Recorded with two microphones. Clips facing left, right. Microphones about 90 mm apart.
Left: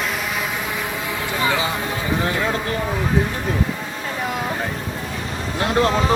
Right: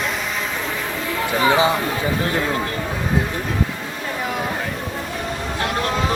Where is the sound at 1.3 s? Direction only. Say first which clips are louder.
Right 5 dB; 20° right (ahead or behind).